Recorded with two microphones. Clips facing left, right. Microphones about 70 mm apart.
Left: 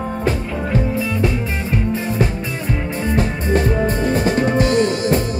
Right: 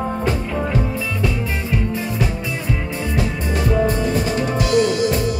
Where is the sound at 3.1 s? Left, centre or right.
Left.